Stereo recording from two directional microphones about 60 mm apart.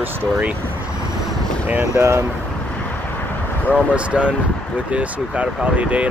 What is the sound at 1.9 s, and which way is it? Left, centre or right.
Speech, right.